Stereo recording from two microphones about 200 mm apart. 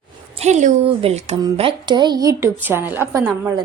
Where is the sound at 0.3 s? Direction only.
35° right (ahead or behind); by 3.0 s 10° right (ahead or behind).